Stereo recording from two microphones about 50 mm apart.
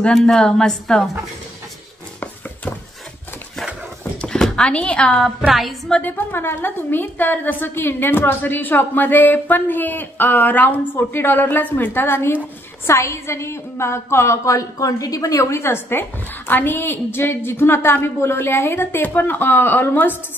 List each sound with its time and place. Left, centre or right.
0.4 s a woman's voice: centre
4.6 s a woman's voice: left
5.5 s a woman's voice: centre
6.0 s a woman's voice: left
7.6 s a woman's voice: left
12.8 s a woman's voice: left